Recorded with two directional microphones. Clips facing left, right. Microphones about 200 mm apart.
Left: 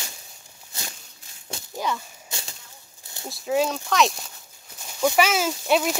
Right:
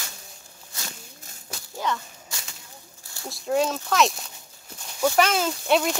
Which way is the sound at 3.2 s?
Centre (ahead or behind).